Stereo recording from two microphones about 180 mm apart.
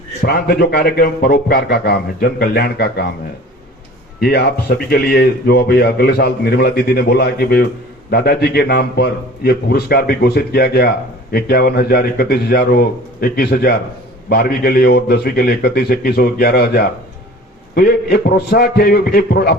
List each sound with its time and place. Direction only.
0.3 s a man's voice: 60° left (ahead or behind)
4.2 s a man's voice: 65° left (ahead or behind)